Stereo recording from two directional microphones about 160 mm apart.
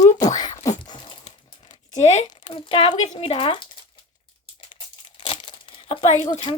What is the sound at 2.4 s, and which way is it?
Speech, 30° left (ahead or behind).